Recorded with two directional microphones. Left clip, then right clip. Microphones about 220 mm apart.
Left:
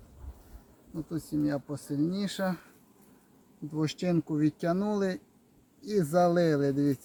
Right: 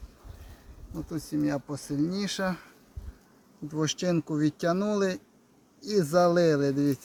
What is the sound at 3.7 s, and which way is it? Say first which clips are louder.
Speech: right 3 dB; 20° right (ahead or behind).